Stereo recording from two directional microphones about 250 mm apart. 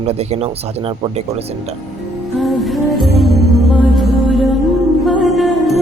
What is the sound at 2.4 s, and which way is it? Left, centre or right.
Music, centre.